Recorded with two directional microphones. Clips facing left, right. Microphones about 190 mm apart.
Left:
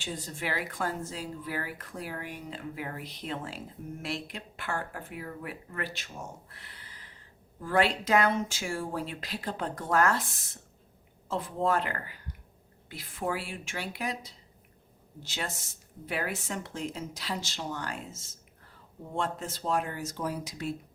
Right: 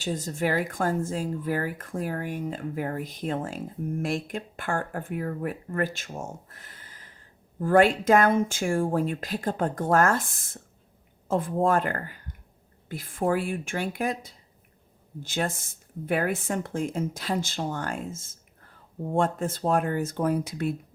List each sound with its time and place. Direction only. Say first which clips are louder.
0.0 s a woman's voice: right 8 dB; 45° right (ahead or behind)